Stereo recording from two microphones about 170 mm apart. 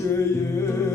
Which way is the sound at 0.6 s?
15° left (ahead or behind).